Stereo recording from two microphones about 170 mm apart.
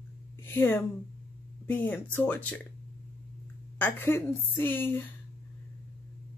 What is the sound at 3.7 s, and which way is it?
A woman's voice, 10° left (ahead or behind).